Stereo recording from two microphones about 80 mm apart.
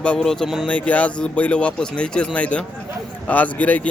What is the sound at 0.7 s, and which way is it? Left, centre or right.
A man's voice, centre.